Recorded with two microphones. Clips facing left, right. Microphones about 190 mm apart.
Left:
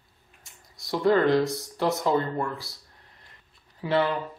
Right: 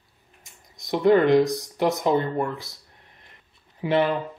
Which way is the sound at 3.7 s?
20° right (ahead or behind).